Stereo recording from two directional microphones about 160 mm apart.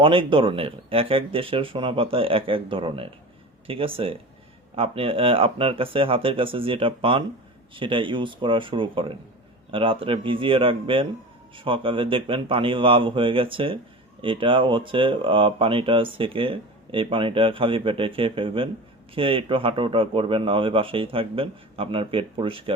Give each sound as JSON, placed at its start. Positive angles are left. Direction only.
{"t": 0.0, "sound": "speech", "side_deg": -30}